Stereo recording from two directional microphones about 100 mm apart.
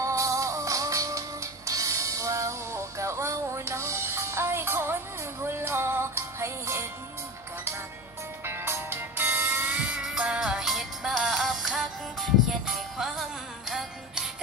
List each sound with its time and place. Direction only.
0.0 s music: 30° right (ahead or behind)
8.5 s music: 25° right (ahead or behind); by 14.2 s 5° right (ahead or behind)